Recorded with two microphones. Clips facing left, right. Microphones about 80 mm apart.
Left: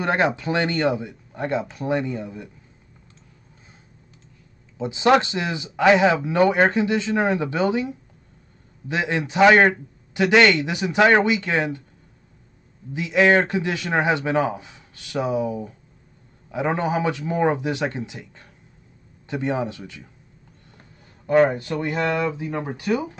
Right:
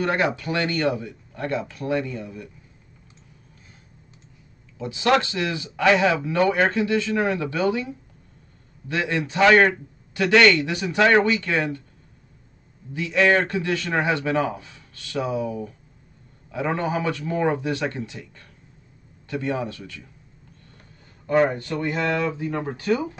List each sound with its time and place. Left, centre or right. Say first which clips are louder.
0.0 s speech: left 2 dB; left
4.7 s a man's voice: left 3 dB; left
12.9 s speech: left 2 dB; centre
21.5 s a man's voice: left 1 dB; centre